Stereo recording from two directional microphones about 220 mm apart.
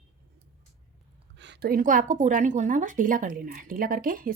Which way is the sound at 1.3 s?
50° right (ahead or behind).